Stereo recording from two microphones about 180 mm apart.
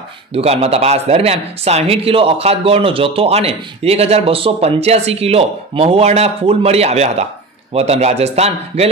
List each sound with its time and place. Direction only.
0.3 s speech: 35° right (ahead or behind)